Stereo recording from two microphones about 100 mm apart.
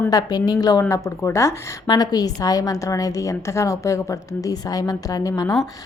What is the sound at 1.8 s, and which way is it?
A woman's voice, 40° left (ahead or behind).